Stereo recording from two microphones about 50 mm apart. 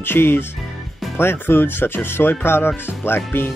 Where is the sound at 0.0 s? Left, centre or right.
Left.